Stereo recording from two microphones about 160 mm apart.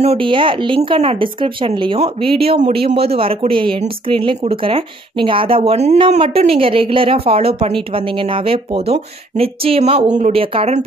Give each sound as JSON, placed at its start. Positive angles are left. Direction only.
{"t": 0.0, "sound": "speech", "side_deg": -35}